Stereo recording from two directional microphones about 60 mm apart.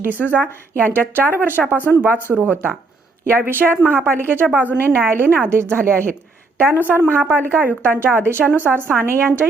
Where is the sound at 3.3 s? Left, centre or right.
Right.